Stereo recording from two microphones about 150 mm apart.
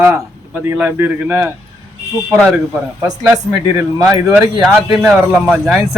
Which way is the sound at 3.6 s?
20° right (ahead or behind).